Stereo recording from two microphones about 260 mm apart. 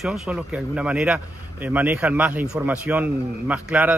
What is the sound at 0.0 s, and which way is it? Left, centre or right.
A man's voice, centre.